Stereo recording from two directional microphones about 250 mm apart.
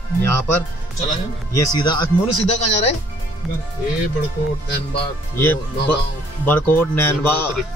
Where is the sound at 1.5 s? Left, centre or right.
Centre.